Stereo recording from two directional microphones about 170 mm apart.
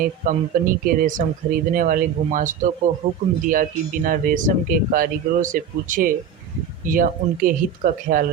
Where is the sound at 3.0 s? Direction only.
30° right (ahead or behind).